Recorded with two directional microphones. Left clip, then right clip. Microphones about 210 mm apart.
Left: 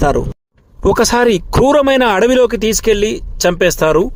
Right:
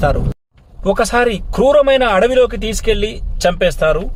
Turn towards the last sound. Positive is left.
turn(degrees=50)  # may be behind; listen again after turning